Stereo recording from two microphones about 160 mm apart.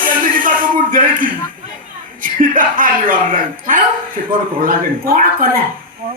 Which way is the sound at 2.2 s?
60° right (ahead or behind).